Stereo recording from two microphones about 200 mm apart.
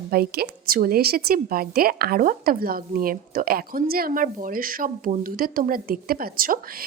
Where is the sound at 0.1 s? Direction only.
50° right (ahead or behind).